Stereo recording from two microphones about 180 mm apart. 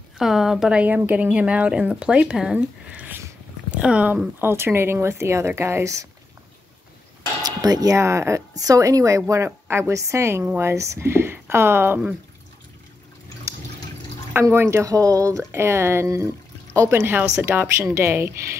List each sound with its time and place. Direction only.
0.2 s a woman's voice: centre (ahead or behind)
7.4 s a woman's voice: 20° right (ahead or behind)
14.3 s a woman's voice: 15° right (ahead or behind)